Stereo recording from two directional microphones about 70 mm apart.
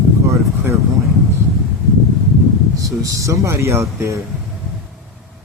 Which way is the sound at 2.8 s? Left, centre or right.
Right.